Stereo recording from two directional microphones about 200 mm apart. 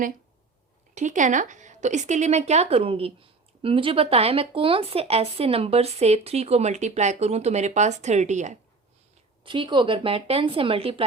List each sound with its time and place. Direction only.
0.9 s a woman's voice: 40° right (ahead or behind)
9.4 s a woman's voice: 25° right (ahead or behind)